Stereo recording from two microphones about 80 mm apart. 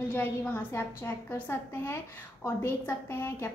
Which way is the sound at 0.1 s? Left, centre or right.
Left.